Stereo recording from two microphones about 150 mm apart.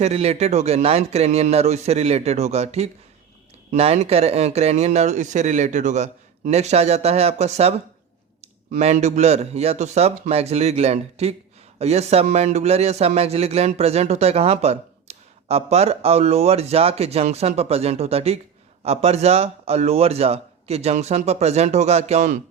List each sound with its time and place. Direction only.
0.0 s a man's voice: 45° right (ahead or behind)